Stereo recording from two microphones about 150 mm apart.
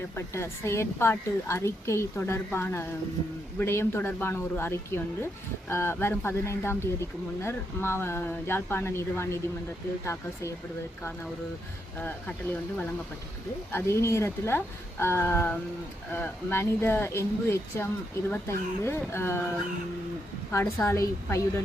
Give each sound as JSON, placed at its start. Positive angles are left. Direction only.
{"t": 0.2, "sound": "speech", "side_deg": 20}
{"t": 11.9, "sound": "speech", "side_deg": 10}
{"t": 20.5, "sound": "a woman's voice", "side_deg": 20}